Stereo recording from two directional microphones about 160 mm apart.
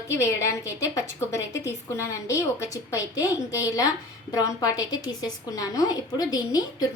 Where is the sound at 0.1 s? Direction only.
15° left (ahead or behind).